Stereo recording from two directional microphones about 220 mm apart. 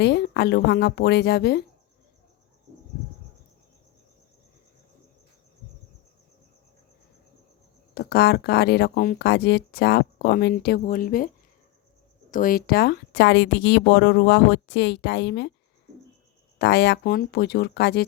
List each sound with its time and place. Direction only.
0.0 s speech: 50° left (ahead or behind)
7.9 s speech: 45° left (ahead or behind)
12.3 s speech: 40° left (ahead or behind)
16.6 s speech: 50° left (ahead or behind)